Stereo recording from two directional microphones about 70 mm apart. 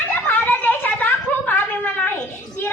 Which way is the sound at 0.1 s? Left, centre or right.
Left.